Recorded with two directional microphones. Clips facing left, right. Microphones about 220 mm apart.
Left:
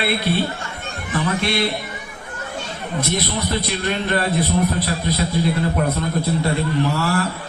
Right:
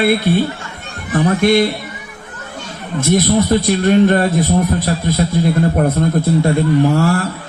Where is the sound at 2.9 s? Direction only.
45° right (ahead or behind).